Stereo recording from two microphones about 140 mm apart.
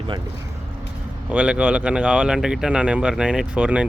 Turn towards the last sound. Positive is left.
turn(degrees=-10)  # may be behind; listen again after turning